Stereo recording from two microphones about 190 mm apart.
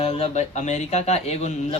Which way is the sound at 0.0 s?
30° left (ahead or behind).